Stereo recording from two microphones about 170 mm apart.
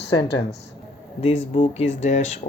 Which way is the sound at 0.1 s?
25° left (ahead or behind).